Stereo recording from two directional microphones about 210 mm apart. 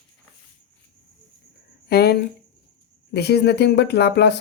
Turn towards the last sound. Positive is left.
turn(degrees=50)  # may be behind; listen again after turning